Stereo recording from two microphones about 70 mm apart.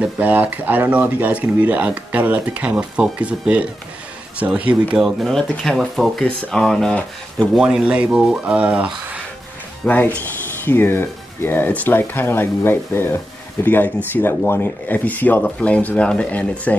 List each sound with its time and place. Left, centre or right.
0.0 s speech: right
4.9 s speech: centre
5.3 s speech: centre
7.5 s speech: centre
9.8 s speech: left